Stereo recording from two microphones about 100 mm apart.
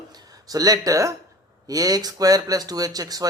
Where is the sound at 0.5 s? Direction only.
40° right (ahead or behind).